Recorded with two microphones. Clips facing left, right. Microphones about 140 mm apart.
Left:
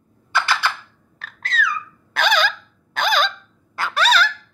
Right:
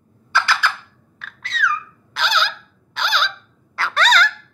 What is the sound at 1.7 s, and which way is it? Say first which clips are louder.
Squeak: right 2 dB; 55° left (ahead or behind).